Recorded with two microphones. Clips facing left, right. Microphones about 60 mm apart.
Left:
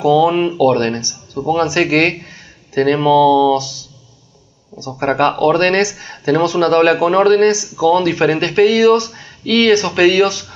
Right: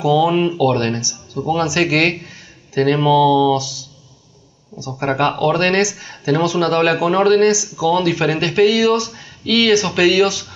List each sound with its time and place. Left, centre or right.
0.0 s speech: centre
3.5 s speech: left
5.4 s speech: left
9.1 s a sound: left
9.6 s speech: left